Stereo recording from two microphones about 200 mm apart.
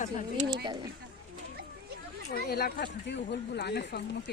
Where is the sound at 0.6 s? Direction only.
20° right (ahead or behind).